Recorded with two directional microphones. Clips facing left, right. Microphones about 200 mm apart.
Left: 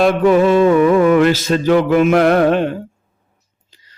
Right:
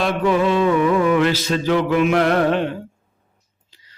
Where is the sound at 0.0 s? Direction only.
50° left (ahead or behind).